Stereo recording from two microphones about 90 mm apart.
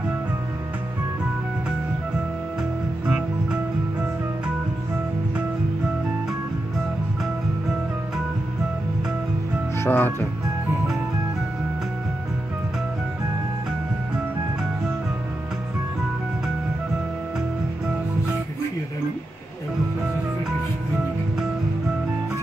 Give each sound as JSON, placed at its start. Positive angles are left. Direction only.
{"t": 9.8, "sound": "speech", "side_deg": 25}